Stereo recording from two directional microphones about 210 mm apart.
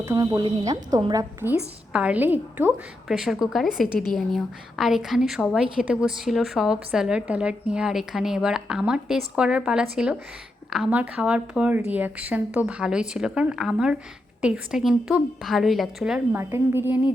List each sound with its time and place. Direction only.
0.0 s a woman's voice: 15° right (ahead or behind)